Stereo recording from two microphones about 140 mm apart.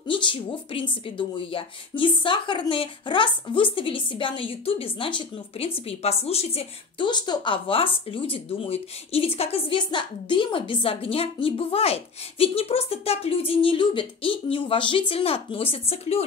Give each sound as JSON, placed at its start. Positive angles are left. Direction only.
{"t": 0.0, "sound": "a woman's voice", "side_deg": 35}
{"t": 7.1, "sound": "speech", "side_deg": 35}